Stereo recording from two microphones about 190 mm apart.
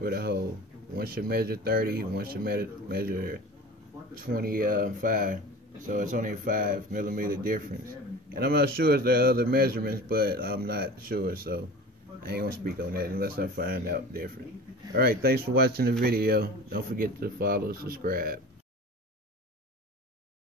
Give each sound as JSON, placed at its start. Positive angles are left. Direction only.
{"t": 0.0, "sound": "speech", "side_deg": -55}